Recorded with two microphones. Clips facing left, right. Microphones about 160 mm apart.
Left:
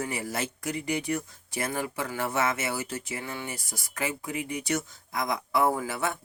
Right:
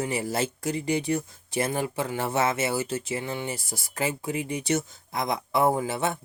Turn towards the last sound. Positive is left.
turn(degrees=-25)  # may be behind; listen again after turning